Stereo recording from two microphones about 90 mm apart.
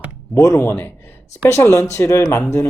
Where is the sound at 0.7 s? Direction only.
20° left (ahead or behind).